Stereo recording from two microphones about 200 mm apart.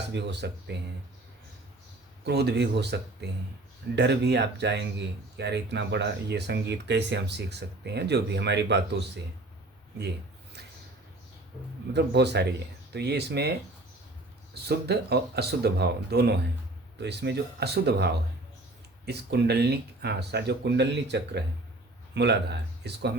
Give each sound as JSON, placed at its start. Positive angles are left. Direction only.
{"t": 0.1, "sound": "speech", "side_deg": -60}
{"t": 2.2, "sound": "speech", "side_deg": -55}
{"t": 11.9, "sound": "speech", "side_deg": -55}
{"t": 14.5, "sound": "speech", "side_deg": -55}